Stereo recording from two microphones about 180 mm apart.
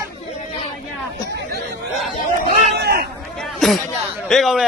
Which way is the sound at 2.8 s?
60° right (ahead or behind).